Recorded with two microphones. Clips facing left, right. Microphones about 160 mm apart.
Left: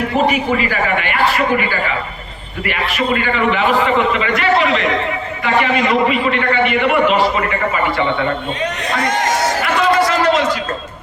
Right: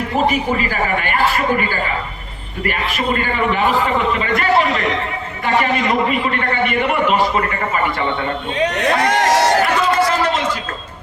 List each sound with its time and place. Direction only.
0.3 s a man's voice: 40° right (ahead or behind)
3.5 s a man's voice: 40° right (ahead or behind)
9.0 s a sound: 65° right (ahead or behind)